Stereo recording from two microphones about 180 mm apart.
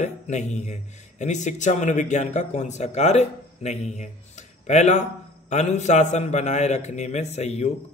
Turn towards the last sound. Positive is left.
turn(degrees=35)  # may be behind; listen again after turning